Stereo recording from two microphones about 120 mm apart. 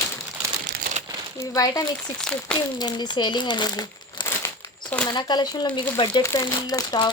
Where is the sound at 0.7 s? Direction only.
90° right.